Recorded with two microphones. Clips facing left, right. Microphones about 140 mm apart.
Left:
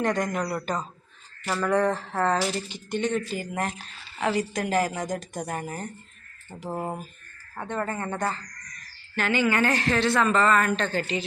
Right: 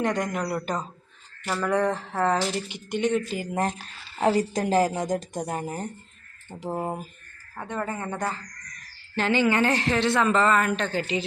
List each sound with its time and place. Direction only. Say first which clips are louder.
0.0 s speech: even; 15° right (ahead or behind)
1.5 s speech: left 1 dB; 5° right (ahead or behind)
3.3 s a woman's voice: right 3 dB; 30° right (ahead or behind); by 8.2 s 10° right (ahead or behind)
9.1 s a woman's voice: right 2 dB; 25° right (ahead or behind)